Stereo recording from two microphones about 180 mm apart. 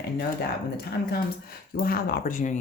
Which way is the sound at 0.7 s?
60° left (ahead or behind).